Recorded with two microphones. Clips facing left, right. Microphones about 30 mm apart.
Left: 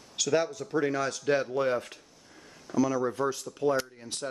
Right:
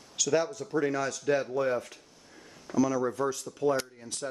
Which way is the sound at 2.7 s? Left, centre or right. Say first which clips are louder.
Even; centre.